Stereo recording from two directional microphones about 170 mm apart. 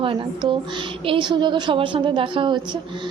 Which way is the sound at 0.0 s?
30° right (ahead or behind).